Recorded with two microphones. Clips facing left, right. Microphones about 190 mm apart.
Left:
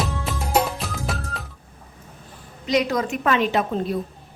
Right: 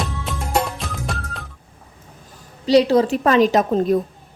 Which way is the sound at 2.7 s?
30° right (ahead or behind).